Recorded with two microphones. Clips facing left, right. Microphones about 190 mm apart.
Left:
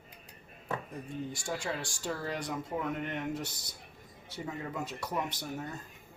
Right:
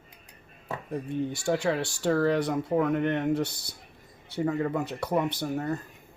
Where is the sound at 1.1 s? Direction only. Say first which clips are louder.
Right 10 dB; 65° right (ahead or behind).